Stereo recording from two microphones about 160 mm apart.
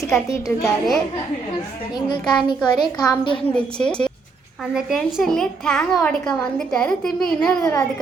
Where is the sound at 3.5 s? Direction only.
5° left (ahead or behind).